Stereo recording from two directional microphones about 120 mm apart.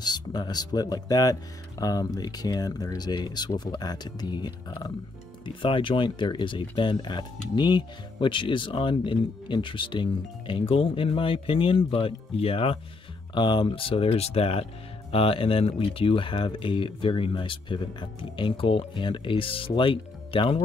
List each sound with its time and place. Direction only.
0.0 s speech: 35° left (ahead or behind); by 12.7 s 50° left (ahead or behind)
13.3 s speech: 40° left (ahead or behind)